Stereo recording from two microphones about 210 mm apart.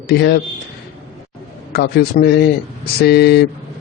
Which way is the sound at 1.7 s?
50° left (ahead or behind).